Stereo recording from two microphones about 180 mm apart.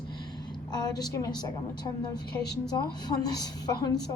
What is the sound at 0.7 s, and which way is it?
Speech, 20° left (ahead or behind).